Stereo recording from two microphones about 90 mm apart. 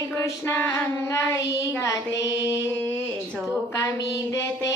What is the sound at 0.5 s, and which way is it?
Music, 25° left (ahead or behind).